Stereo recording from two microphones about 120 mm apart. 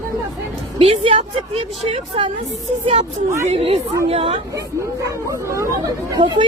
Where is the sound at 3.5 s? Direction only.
55° right (ahead or behind).